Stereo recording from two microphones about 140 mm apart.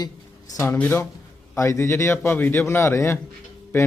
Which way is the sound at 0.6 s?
15° left (ahead or behind).